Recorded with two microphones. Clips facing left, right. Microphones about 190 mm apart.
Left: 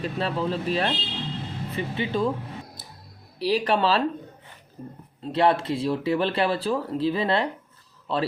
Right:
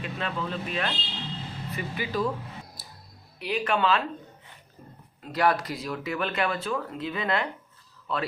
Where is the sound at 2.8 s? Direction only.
25° left (ahead or behind).